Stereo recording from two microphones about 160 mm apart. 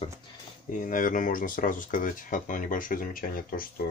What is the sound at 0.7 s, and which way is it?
Speech, 55° left (ahead or behind).